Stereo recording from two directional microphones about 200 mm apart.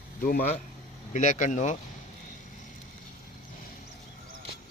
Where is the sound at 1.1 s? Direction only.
40° left (ahead or behind).